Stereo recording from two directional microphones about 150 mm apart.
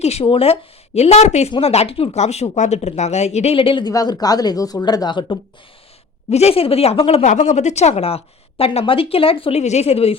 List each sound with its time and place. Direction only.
0.0 s speech: 45° left (ahead or behind)
6.3 s speech: 40° left (ahead or behind)